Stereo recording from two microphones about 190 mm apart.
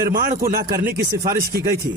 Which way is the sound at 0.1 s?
50° right (ahead or behind).